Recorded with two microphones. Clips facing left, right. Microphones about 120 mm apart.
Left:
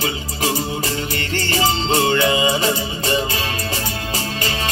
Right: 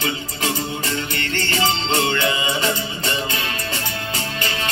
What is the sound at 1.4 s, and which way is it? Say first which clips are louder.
Music: left 2 dB; 15° left (ahead or behind).